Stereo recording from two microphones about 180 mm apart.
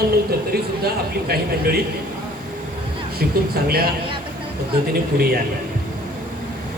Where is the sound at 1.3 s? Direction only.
60° right (ahead or behind).